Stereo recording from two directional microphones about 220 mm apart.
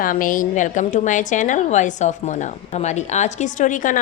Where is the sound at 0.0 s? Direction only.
40° left (ahead or behind).